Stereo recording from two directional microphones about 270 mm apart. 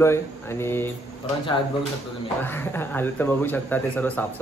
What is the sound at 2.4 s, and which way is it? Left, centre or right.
Speech, centre.